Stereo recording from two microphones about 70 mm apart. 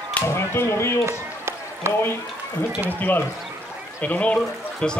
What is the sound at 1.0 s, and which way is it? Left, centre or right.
Run, right.